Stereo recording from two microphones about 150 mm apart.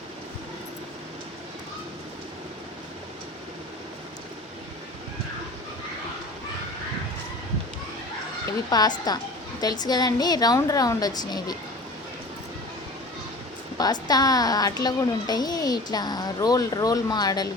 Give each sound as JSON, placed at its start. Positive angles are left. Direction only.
{"t": 8.7, "sound": "a woman's voice", "side_deg": 25}
{"t": 13.7, "sound": "a woman's voice", "side_deg": 25}